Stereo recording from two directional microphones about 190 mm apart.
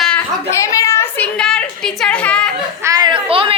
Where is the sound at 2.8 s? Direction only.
20° right (ahead or behind).